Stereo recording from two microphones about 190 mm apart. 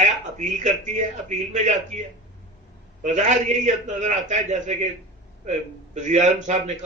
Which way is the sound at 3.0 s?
40° right (ahead or behind).